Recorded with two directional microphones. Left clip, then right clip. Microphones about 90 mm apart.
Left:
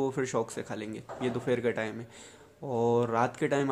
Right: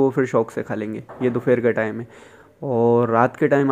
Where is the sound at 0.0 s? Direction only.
50° right (ahead or behind).